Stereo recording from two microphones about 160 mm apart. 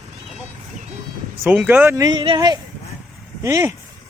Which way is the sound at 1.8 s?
20° right (ahead or behind).